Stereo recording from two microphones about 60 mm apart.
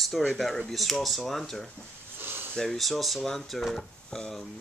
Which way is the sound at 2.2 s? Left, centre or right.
Right.